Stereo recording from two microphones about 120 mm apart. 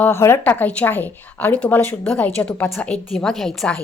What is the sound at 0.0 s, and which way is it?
A woman's voice, 20° left (ahead or behind).